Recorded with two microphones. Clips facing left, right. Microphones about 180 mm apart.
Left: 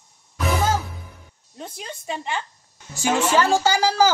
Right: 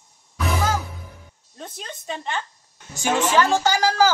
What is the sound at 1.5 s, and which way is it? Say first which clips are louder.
Speech: left 1 dB; 10° left (ahead or behind).